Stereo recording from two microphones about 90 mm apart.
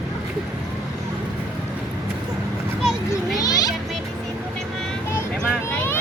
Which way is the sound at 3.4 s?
45° left (ahead or behind).